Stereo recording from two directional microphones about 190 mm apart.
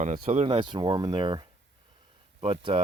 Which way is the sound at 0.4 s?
25° right (ahead or behind).